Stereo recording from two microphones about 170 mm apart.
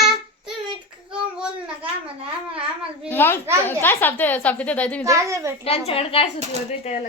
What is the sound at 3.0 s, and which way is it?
A child's voice, 15° left (ahead or behind).